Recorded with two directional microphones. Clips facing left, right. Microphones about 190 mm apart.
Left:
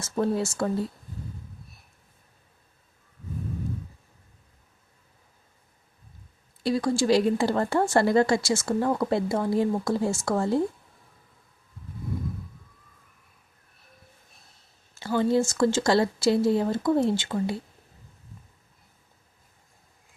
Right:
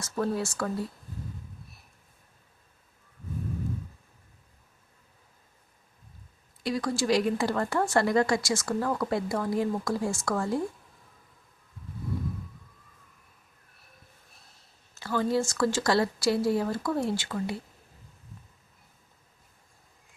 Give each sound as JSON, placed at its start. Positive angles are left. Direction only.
{"t": 0.0, "sound": "speech", "side_deg": 25}
{"t": 6.6, "sound": "speech", "side_deg": 30}
{"t": 14.9, "sound": "speech", "side_deg": 25}